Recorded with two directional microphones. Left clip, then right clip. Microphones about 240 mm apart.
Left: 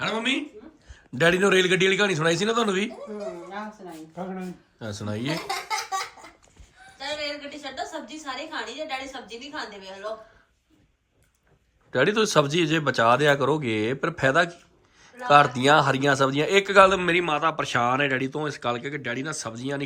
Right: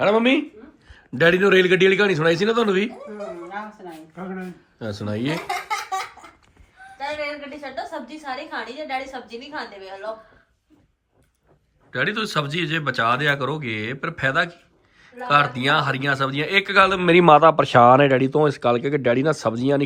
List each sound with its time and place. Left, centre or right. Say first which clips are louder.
0.0 s speech: right 8 dB; centre
0.9 s a man's voice: right 4 dB; centre
5.5 s laughter: right 3 dB; right
7.6 s a woman's voice: right 4 dB; right
11.9 s a man's voice: left 2 dB; centre
17.0 s speech: right 10 dB; centre